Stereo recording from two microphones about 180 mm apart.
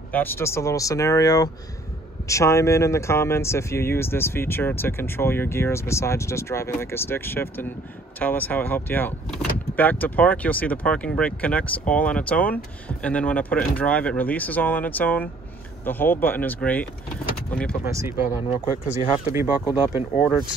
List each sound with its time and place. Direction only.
0.1 s speech: 10° left (ahead or behind)
17.8 s speech: 15° right (ahead or behind)
19.9 s speech: 10° right (ahead or behind)